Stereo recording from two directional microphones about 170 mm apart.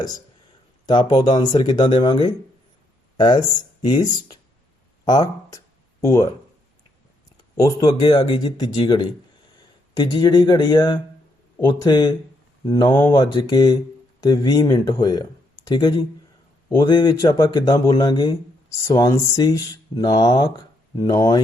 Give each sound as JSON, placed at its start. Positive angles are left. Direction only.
{"t": 0.9, "sound": "speech", "side_deg": 25}
{"t": 5.0, "sound": "a sound", "side_deg": 25}
{"t": 7.5, "sound": "speech", "side_deg": 20}